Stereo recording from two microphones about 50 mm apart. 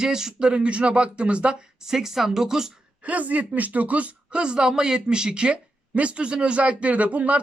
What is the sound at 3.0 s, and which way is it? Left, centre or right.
A woman's voice, right.